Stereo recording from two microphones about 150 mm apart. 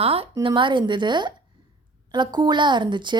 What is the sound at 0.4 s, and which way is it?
Speech, 30° right (ahead or behind).